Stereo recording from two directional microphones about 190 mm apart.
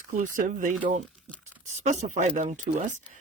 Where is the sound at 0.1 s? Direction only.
45° right (ahead or behind).